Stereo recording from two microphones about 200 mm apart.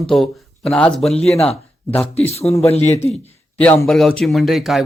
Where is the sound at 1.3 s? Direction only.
30° left (ahead or behind).